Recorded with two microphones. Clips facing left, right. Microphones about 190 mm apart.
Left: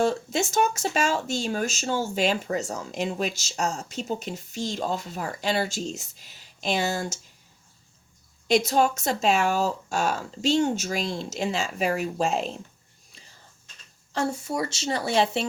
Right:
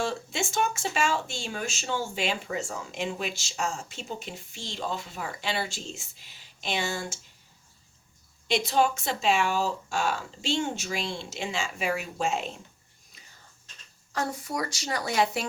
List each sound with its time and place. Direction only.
0.0 s speech: 40° left (ahead or behind)
8.4 s speech: 45° left (ahead or behind)
14.1 s a woman's voice: 25° left (ahead or behind)